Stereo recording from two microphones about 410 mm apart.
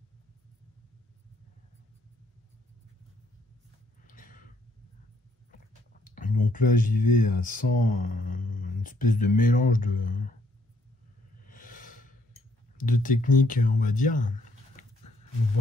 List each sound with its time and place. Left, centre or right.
4.1 s gasp: centre
6.0 s a sound: centre
7.1 s speech: centre
11.4 s a sound: centre
12.7 s speech: centre
14.8 s dog: centre